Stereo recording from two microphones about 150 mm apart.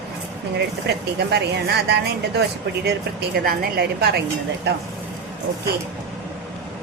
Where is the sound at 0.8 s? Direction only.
90° right.